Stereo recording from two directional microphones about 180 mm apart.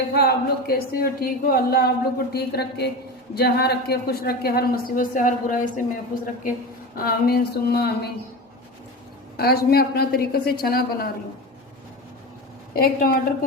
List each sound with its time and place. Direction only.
0.1 s speech: 60° left (ahead or behind)
6.9 s speech: 55° left (ahead or behind)
9.4 s speech: 60° left (ahead or behind)
12.7 s a woman's voice: 55° left (ahead or behind)